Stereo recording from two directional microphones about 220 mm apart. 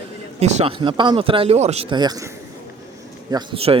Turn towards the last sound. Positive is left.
turn(degrees=-25)  # may be behind; listen again after turning